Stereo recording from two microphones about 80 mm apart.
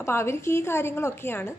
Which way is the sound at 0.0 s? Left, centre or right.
Left.